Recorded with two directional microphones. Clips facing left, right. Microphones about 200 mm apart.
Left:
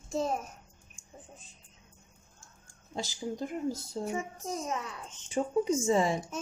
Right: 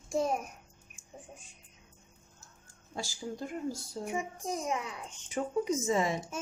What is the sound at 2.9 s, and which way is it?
Speech, 20° left (ahead or behind).